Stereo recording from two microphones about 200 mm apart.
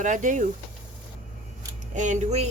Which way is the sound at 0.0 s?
40° right (ahead or behind).